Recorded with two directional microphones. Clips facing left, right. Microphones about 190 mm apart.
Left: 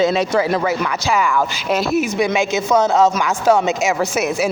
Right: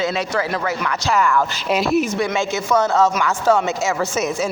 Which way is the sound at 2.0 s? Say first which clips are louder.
Left 2 dB; 15° left (ahead or behind).